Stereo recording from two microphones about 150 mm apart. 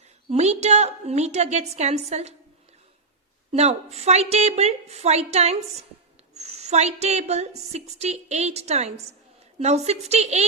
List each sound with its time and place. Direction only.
0.3 s a woman's voice: 50° right (ahead or behind)
3.5 s a woman's voice: 45° right (ahead or behind)